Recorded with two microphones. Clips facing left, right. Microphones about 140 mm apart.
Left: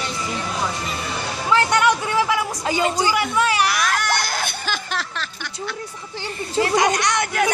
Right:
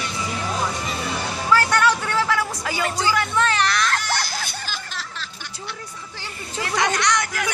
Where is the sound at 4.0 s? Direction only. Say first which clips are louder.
Left 4 dB; 55° left (ahead or behind).